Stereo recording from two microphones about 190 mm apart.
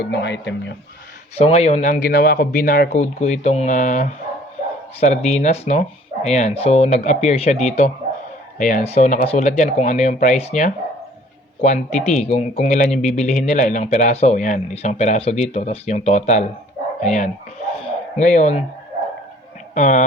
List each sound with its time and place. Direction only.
0.0 s a man's voice: 65° left (ahead or behind)
1.4 s speech: 35° left (ahead or behind)
17.8 s a sound: 40° left (ahead or behind)
19.7 s speech: 40° left (ahead or behind)